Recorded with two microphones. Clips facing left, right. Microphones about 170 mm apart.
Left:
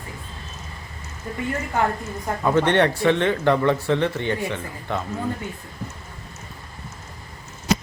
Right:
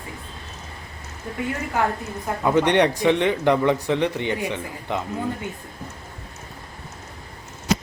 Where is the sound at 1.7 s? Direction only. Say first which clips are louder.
Left 1 dB; 5° right (ahead or behind).